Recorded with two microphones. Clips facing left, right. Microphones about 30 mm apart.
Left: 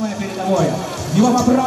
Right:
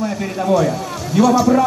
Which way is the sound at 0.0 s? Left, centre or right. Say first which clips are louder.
Right 1 dB; centre.